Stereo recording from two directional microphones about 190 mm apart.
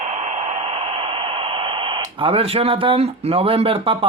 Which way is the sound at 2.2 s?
30° right (ahead or behind).